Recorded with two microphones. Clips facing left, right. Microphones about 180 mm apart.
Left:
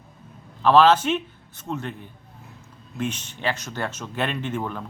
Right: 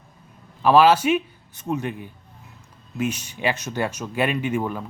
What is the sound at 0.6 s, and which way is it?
Speech, 10° right (ahead or behind).